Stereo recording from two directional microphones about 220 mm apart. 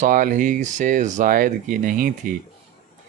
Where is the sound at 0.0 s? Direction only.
35° right (ahead or behind).